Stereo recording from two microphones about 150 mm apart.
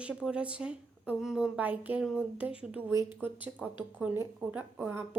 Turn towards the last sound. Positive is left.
turn(degrees=-10)  # may be behind; listen again after turning